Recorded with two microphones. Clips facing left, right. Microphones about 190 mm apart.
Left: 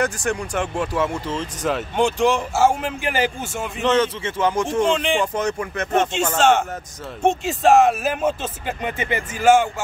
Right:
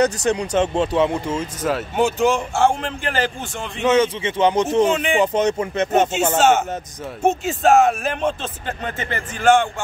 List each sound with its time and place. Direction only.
0.0 s speech: 20° right (ahead or behind); by 3.8 s 10° left (ahead or behind)
3.8 s speech: 10° right (ahead or behind)
4.8 s speech: 5° right (ahead or behind)
5.2 s speech: 20° right (ahead or behind)
6.3 s speech: 5° right (ahead or behind)